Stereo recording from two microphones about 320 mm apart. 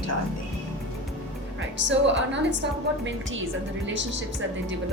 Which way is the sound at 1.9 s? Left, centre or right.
Right.